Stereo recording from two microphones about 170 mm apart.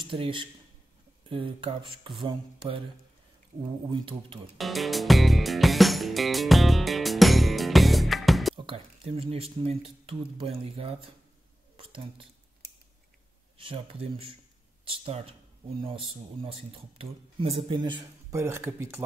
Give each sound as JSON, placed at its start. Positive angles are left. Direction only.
{"t": 0.0, "sound": "speech", "side_deg": -30}
{"t": 2.2, "sound": "a sound", "side_deg": -30}
{"t": 3.9, "sound": "speech", "side_deg": -30}
{"t": 4.6, "sound": "music", "side_deg": 0}
{"t": 8.5, "sound": "speech", "side_deg": -30}
{"t": 13.6, "sound": "speech", "side_deg": -35}
{"t": 18.4, "sound": "speech", "side_deg": -15}